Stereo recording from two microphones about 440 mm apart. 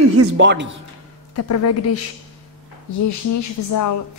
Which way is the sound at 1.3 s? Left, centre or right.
Left.